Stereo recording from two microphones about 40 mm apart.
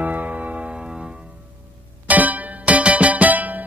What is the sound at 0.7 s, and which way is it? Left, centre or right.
Music, centre.